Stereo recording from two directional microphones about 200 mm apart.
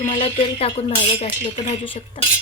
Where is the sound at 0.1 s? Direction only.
25° left (ahead or behind).